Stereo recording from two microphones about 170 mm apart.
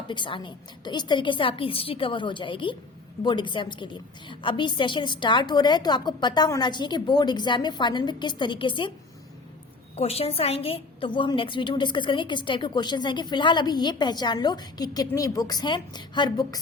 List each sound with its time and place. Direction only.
0.1 s a woman's voice: 30° left (ahead or behind)
9.9 s a woman's voice: 35° left (ahead or behind)